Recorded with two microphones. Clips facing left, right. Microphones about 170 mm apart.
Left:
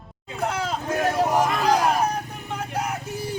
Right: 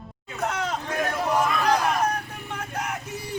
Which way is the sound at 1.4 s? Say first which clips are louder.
Left 2 dB; 35° left (ahead or behind).